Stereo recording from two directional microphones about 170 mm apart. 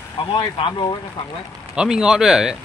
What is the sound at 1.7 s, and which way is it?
Speech, 5° right (ahead or behind).